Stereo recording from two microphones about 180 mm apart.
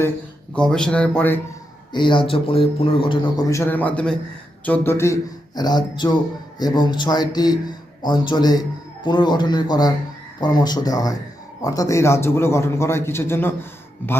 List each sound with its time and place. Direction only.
0.5 s a man's voice: 5° left (ahead or behind)
1.9 s a man's voice: 25° left (ahead or behind); by 14.2 s 10° left (ahead or behind)